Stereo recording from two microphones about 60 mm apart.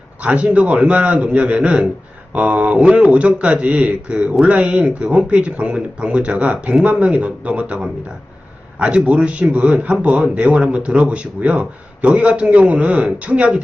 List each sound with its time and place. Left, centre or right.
0.2 s speech: right